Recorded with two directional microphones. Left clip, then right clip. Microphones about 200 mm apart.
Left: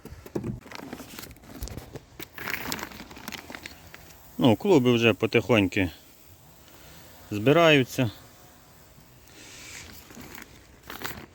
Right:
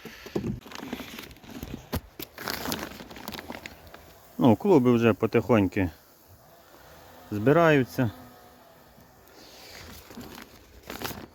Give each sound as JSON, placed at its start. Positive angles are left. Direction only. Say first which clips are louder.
{"t": 0.0, "sound": "vehicle", "louder": "right 2 dB", "side_deg": 10}
{"t": 2.1, "sound": "a sound", "louder": "left 5 dB", "side_deg": -40}
{"t": 3.5, "sound": "a sound", "louder": "right 1 dB", "side_deg": 5}
{"t": 4.4, "sound": "speech", "louder": "even", "side_deg": 0}
{"t": 7.3, "sound": "speech", "louder": "left 1 dB", "side_deg": 0}
{"t": 10.8, "sound": "crumpling", "louder": "right 1 dB", "side_deg": -25}